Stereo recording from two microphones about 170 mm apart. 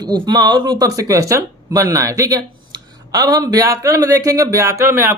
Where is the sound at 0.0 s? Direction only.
25° right (ahead or behind).